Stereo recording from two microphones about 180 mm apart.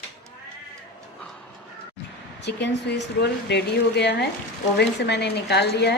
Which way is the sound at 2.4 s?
70° left (ahead or behind).